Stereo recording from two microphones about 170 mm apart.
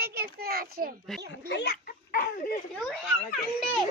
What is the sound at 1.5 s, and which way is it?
Speech, 90° left.